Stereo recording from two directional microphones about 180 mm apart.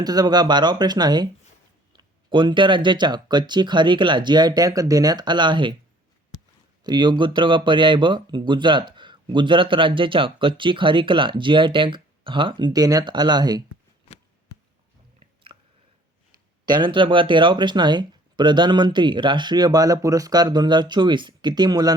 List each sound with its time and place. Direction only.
0.0 s speech: 20° right (ahead or behind)
6.8 s speech: 25° right (ahead or behind)
15.5 s chewing: 20° right (ahead or behind)
16.6 s speech: 25° right (ahead or behind)